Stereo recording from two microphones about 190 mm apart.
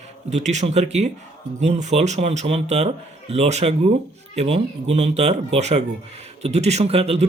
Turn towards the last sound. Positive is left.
turn(degrees=-30)  # may be behind; listen again after turning